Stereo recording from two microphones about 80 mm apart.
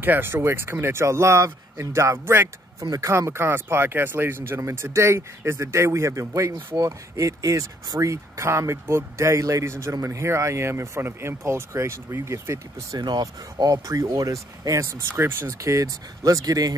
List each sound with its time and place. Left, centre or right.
0.0 s speech: right
2.8 s speech: right
13.0 s speech: right
15.6 s speech: right